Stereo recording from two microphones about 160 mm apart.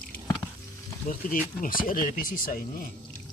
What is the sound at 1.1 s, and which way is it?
Speech, 60° left (ahead or behind).